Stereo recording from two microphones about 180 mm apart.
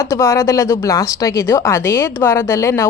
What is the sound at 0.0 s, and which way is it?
A woman's voice, 15° left (ahead or behind).